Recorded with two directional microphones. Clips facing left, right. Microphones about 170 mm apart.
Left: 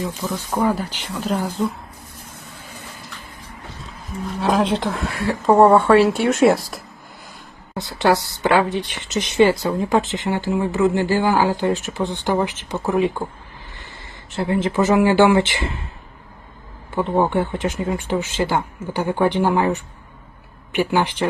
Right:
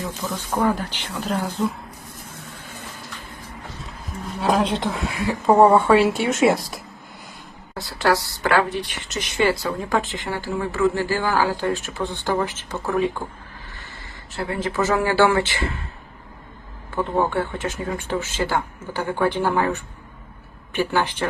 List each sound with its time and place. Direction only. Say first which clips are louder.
0.2 s speech: even; 5° left (ahead or behind)
4.4 s speech: left 2 dB; centre (ahead or behind)
7.8 s speech: left 3 dB; 20° left (ahead or behind)
14.3 s speech: left 5 dB; 20° left (ahead or behind)
16.9 s speech: left 3 dB; 15° left (ahead or behind)